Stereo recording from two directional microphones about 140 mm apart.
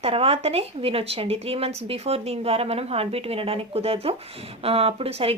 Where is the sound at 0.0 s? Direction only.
45° right (ahead or behind).